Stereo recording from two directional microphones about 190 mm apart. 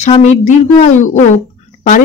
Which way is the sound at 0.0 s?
35° left (ahead or behind).